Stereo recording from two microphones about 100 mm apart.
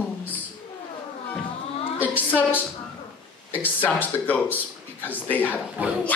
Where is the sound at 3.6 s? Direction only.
15° left (ahead or behind).